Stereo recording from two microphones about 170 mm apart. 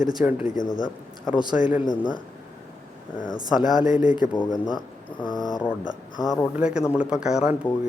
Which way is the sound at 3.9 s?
50° left (ahead or behind).